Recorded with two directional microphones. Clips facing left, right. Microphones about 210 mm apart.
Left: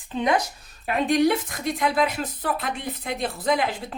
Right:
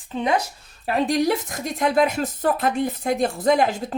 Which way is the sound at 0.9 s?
35° right (ahead or behind).